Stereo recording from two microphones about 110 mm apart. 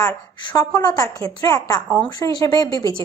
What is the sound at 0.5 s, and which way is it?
A woman's voice, 35° left (ahead or behind).